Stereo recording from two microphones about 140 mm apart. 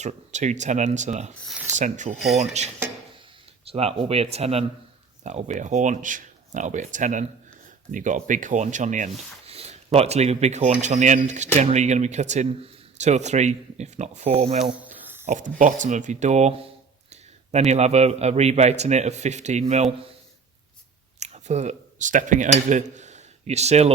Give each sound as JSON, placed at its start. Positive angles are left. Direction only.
{"t": 0.0, "sound": "a man's voice", "side_deg": -55}
{"t": 3.7, "sound": "a man's voice", "side_deg": -45}
{"t": 9.5, "sound": "a man's voice", "side_deg": -45}
{"t": 15.3, "sound": "a man's voice", "side_deg": -65}
{"t": 21.2, "sound": "speech", "side_deg": -50}